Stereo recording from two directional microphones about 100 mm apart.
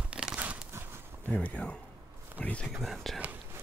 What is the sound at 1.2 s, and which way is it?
Speech, 15° left (ahead or behind).